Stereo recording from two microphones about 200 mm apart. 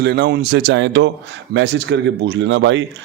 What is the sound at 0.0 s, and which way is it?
A man's voice, 55° right (ahead or behind).